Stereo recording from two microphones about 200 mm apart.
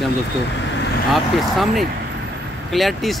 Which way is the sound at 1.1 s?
Centre (ahead or behind).